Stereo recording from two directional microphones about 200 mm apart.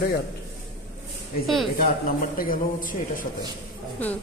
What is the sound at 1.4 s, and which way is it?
Speech, centre (ahead or behind).